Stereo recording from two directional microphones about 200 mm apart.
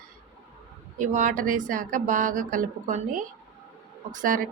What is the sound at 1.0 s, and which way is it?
A woman's voice, 40° right (ahead or behind).